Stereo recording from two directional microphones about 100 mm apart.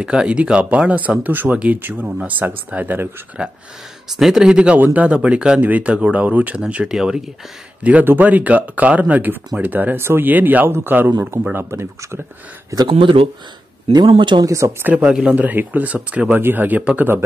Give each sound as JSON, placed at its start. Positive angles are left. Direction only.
{"t": 0.0, "sound": "speech", "side_deg": -10}
{"t": 4.2, "sound": "speech", "side_deg": -5}
{"t": 7.8, "sound": "speech", "side_deg": -20}
{"t": 12.9, "sound": "speech", "side_deg": -65}
{"t": 13.9, "sound": "speech", "side_deg": -55}
{"t": 14.4, "sound": "speech", "side_deg": -30}
{"t": 14.9, "sound": "speech", "side_deg": -15}